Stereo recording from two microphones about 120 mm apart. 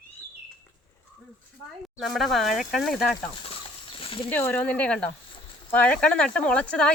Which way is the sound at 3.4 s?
50° left (ahead or behind).